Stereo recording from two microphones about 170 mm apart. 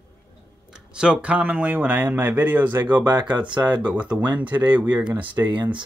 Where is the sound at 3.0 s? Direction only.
25° right (ahead or behind).